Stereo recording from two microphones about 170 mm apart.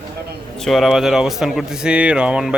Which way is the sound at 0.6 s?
Centre (ahead or behind).